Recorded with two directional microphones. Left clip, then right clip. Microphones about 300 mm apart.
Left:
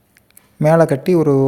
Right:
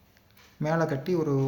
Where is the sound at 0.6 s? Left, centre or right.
Left.